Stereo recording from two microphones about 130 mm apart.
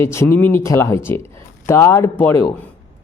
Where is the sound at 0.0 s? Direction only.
20° left (ahead or behind).